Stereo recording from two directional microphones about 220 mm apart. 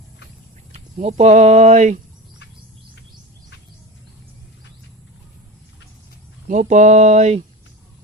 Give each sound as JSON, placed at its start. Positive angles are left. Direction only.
{"t": 0.7, "sound": "speech", "side_deg": -30}
{"t": 6.5, "sound": "speech", "side_deg": -35}